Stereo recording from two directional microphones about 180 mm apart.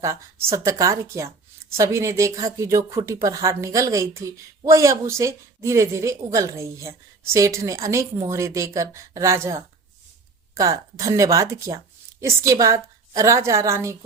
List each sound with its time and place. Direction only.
0.0 s speech: 15° right (ahead or behind)